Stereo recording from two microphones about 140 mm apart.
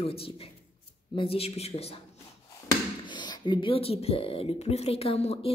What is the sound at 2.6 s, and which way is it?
Speech, 30° left (ahead or behind).